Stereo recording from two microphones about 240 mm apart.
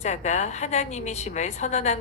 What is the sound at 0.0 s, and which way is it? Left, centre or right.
A woman's voice, left.